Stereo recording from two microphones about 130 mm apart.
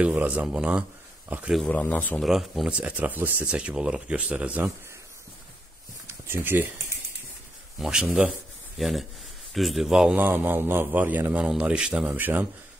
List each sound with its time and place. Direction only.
0.0 s a man's voice: 10° right (ahead or behind)
1.6 s speech: 10° left (ahead or behind)
2.1 s a man's voice: centre (ahead or behind)
6.0 s a sound: 15° right (ahead or behind)
7.8 s a man's voice: 5° right (ahead or behind)
8.7 s a man's voice: centre (ahead or behind)